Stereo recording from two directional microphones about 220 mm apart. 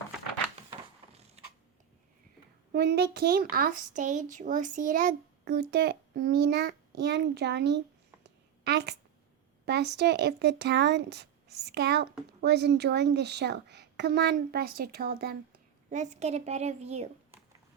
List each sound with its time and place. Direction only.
2.7 s speech: 50° right (ahead or behind)
15.9 s a woman's voice: 30° right (ahead or behind)